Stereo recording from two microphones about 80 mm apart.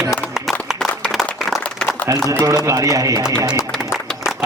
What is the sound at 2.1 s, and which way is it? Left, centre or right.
A man's voice, right.